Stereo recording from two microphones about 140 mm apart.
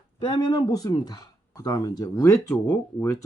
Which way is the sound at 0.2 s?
30° left (ahead or behind).